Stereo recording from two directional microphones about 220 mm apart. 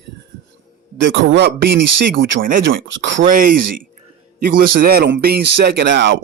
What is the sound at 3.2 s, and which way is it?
Speech, 40° right (ahead or behind).